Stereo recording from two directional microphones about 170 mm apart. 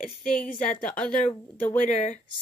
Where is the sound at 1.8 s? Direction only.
45° left (ahead or behind).